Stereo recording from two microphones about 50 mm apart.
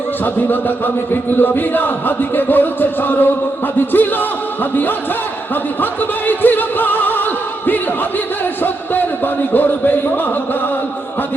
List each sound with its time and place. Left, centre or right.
0.3 s music: left
8.6 s music: left